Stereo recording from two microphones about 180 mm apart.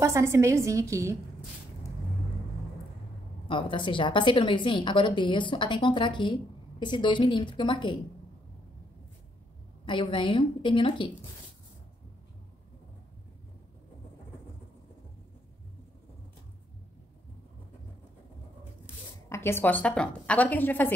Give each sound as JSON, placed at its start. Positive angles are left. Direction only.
{"t": 0.0, "sound": "a woman's voice", "side_deg": -15}
{"t": 3.4, "sound": "a woman's voice", "side_deg": 25}
{"t": 9.8, "sound": "a woman's voice", "side_deg": 25}
{"t": 19.2, "sound": "a woman's voice", "side_deg": 15}